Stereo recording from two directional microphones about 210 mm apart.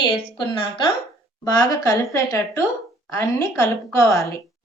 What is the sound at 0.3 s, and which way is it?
A woman's voice, 25° left (ahead or behind).